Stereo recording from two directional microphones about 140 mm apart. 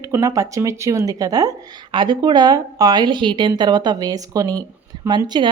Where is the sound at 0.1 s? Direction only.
25° right (ahead or behind).